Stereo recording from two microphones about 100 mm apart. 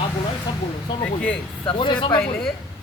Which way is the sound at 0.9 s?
50° left (ahead or behind).